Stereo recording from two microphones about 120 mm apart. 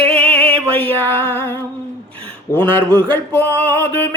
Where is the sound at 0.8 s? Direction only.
20° left (ahead or behind).